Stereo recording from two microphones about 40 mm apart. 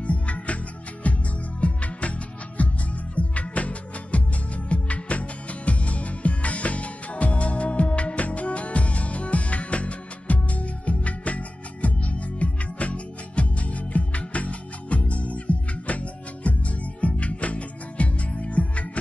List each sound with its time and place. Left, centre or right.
0.0 s music: left